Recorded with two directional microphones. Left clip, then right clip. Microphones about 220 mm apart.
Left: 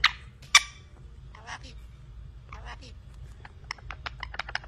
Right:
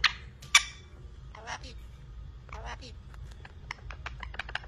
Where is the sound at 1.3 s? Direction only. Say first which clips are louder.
Right 1 dB; 15° right (ahead or behind).